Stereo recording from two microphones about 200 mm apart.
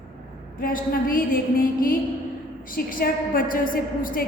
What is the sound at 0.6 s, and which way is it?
A woman's voice, 45° left (ahead or behind).